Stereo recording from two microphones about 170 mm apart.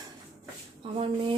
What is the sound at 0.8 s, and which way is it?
Speech, 35° right (ahead or behind).